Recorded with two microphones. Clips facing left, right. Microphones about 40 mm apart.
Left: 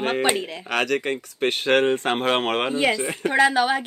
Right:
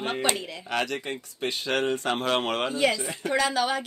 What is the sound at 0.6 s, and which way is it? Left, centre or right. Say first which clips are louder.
A woman's voice: left 6 dB; left.